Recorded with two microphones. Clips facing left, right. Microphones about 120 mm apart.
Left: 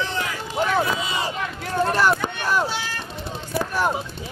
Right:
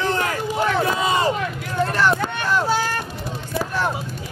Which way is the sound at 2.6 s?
45° right (ahead or behind).